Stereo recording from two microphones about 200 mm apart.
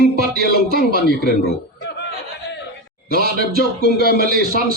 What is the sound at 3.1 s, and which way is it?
Speech, 50° right (ahead or behind).